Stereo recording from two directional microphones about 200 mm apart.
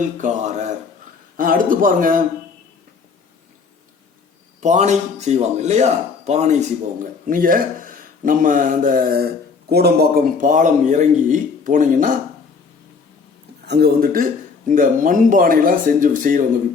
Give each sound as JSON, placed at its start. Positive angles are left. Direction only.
{"t": 0.2, "sound": "speech", "side_deg": -35}
{"t": 4.6, "sound": "speech", "side_deg": -35}
{"t": 13.7, "sound": "speech", "side_deg": -55}